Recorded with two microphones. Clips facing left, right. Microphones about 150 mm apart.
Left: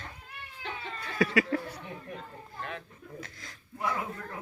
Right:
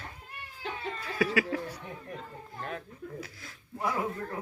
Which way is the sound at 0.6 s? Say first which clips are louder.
Right 3 dB; 5° right (ahead or behind).